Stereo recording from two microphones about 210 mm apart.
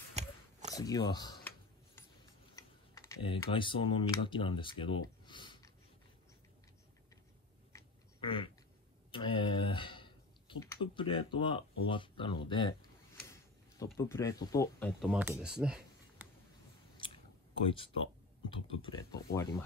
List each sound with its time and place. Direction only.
0.1 s a sound: 35° right (ahead or behind)
0.7 s speech: 20° left (ahead or behind)
2.5 s typing: 15° left (ahead or behind)
3.3 s speech: 25° left (ahead or behind)
7.7 s duck: 25° left (ahead or behind)
9.1 s a sound: 25° left (ahead or behind)
11.9 s speech: 25° left (ahead or behind)
13.9 s speech: 15° left (ahead or behind)
15.0 s speech: 5° right (ahead or behind)
16.9 s clicking: 25° left (ahead or behind)
18.5 s speech: 25° left (ahead or behind)